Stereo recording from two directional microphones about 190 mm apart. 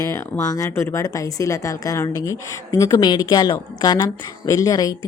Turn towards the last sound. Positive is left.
turn(degrees=20)  # may be behind; listen again after turning